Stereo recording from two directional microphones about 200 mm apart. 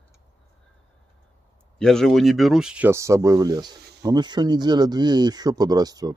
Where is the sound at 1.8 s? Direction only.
Centre (ahead or behind).